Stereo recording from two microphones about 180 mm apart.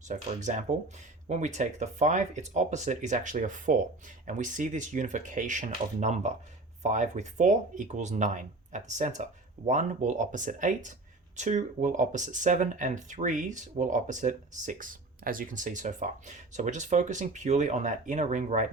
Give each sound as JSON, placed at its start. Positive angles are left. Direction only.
{"t": 0.1, "sound": "speech", "side_deg": -40}